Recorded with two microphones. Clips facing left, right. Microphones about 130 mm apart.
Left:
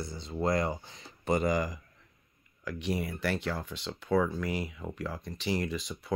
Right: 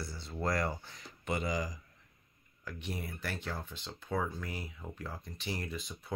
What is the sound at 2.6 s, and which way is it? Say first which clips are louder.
Speech: left 8 dB; 90° left.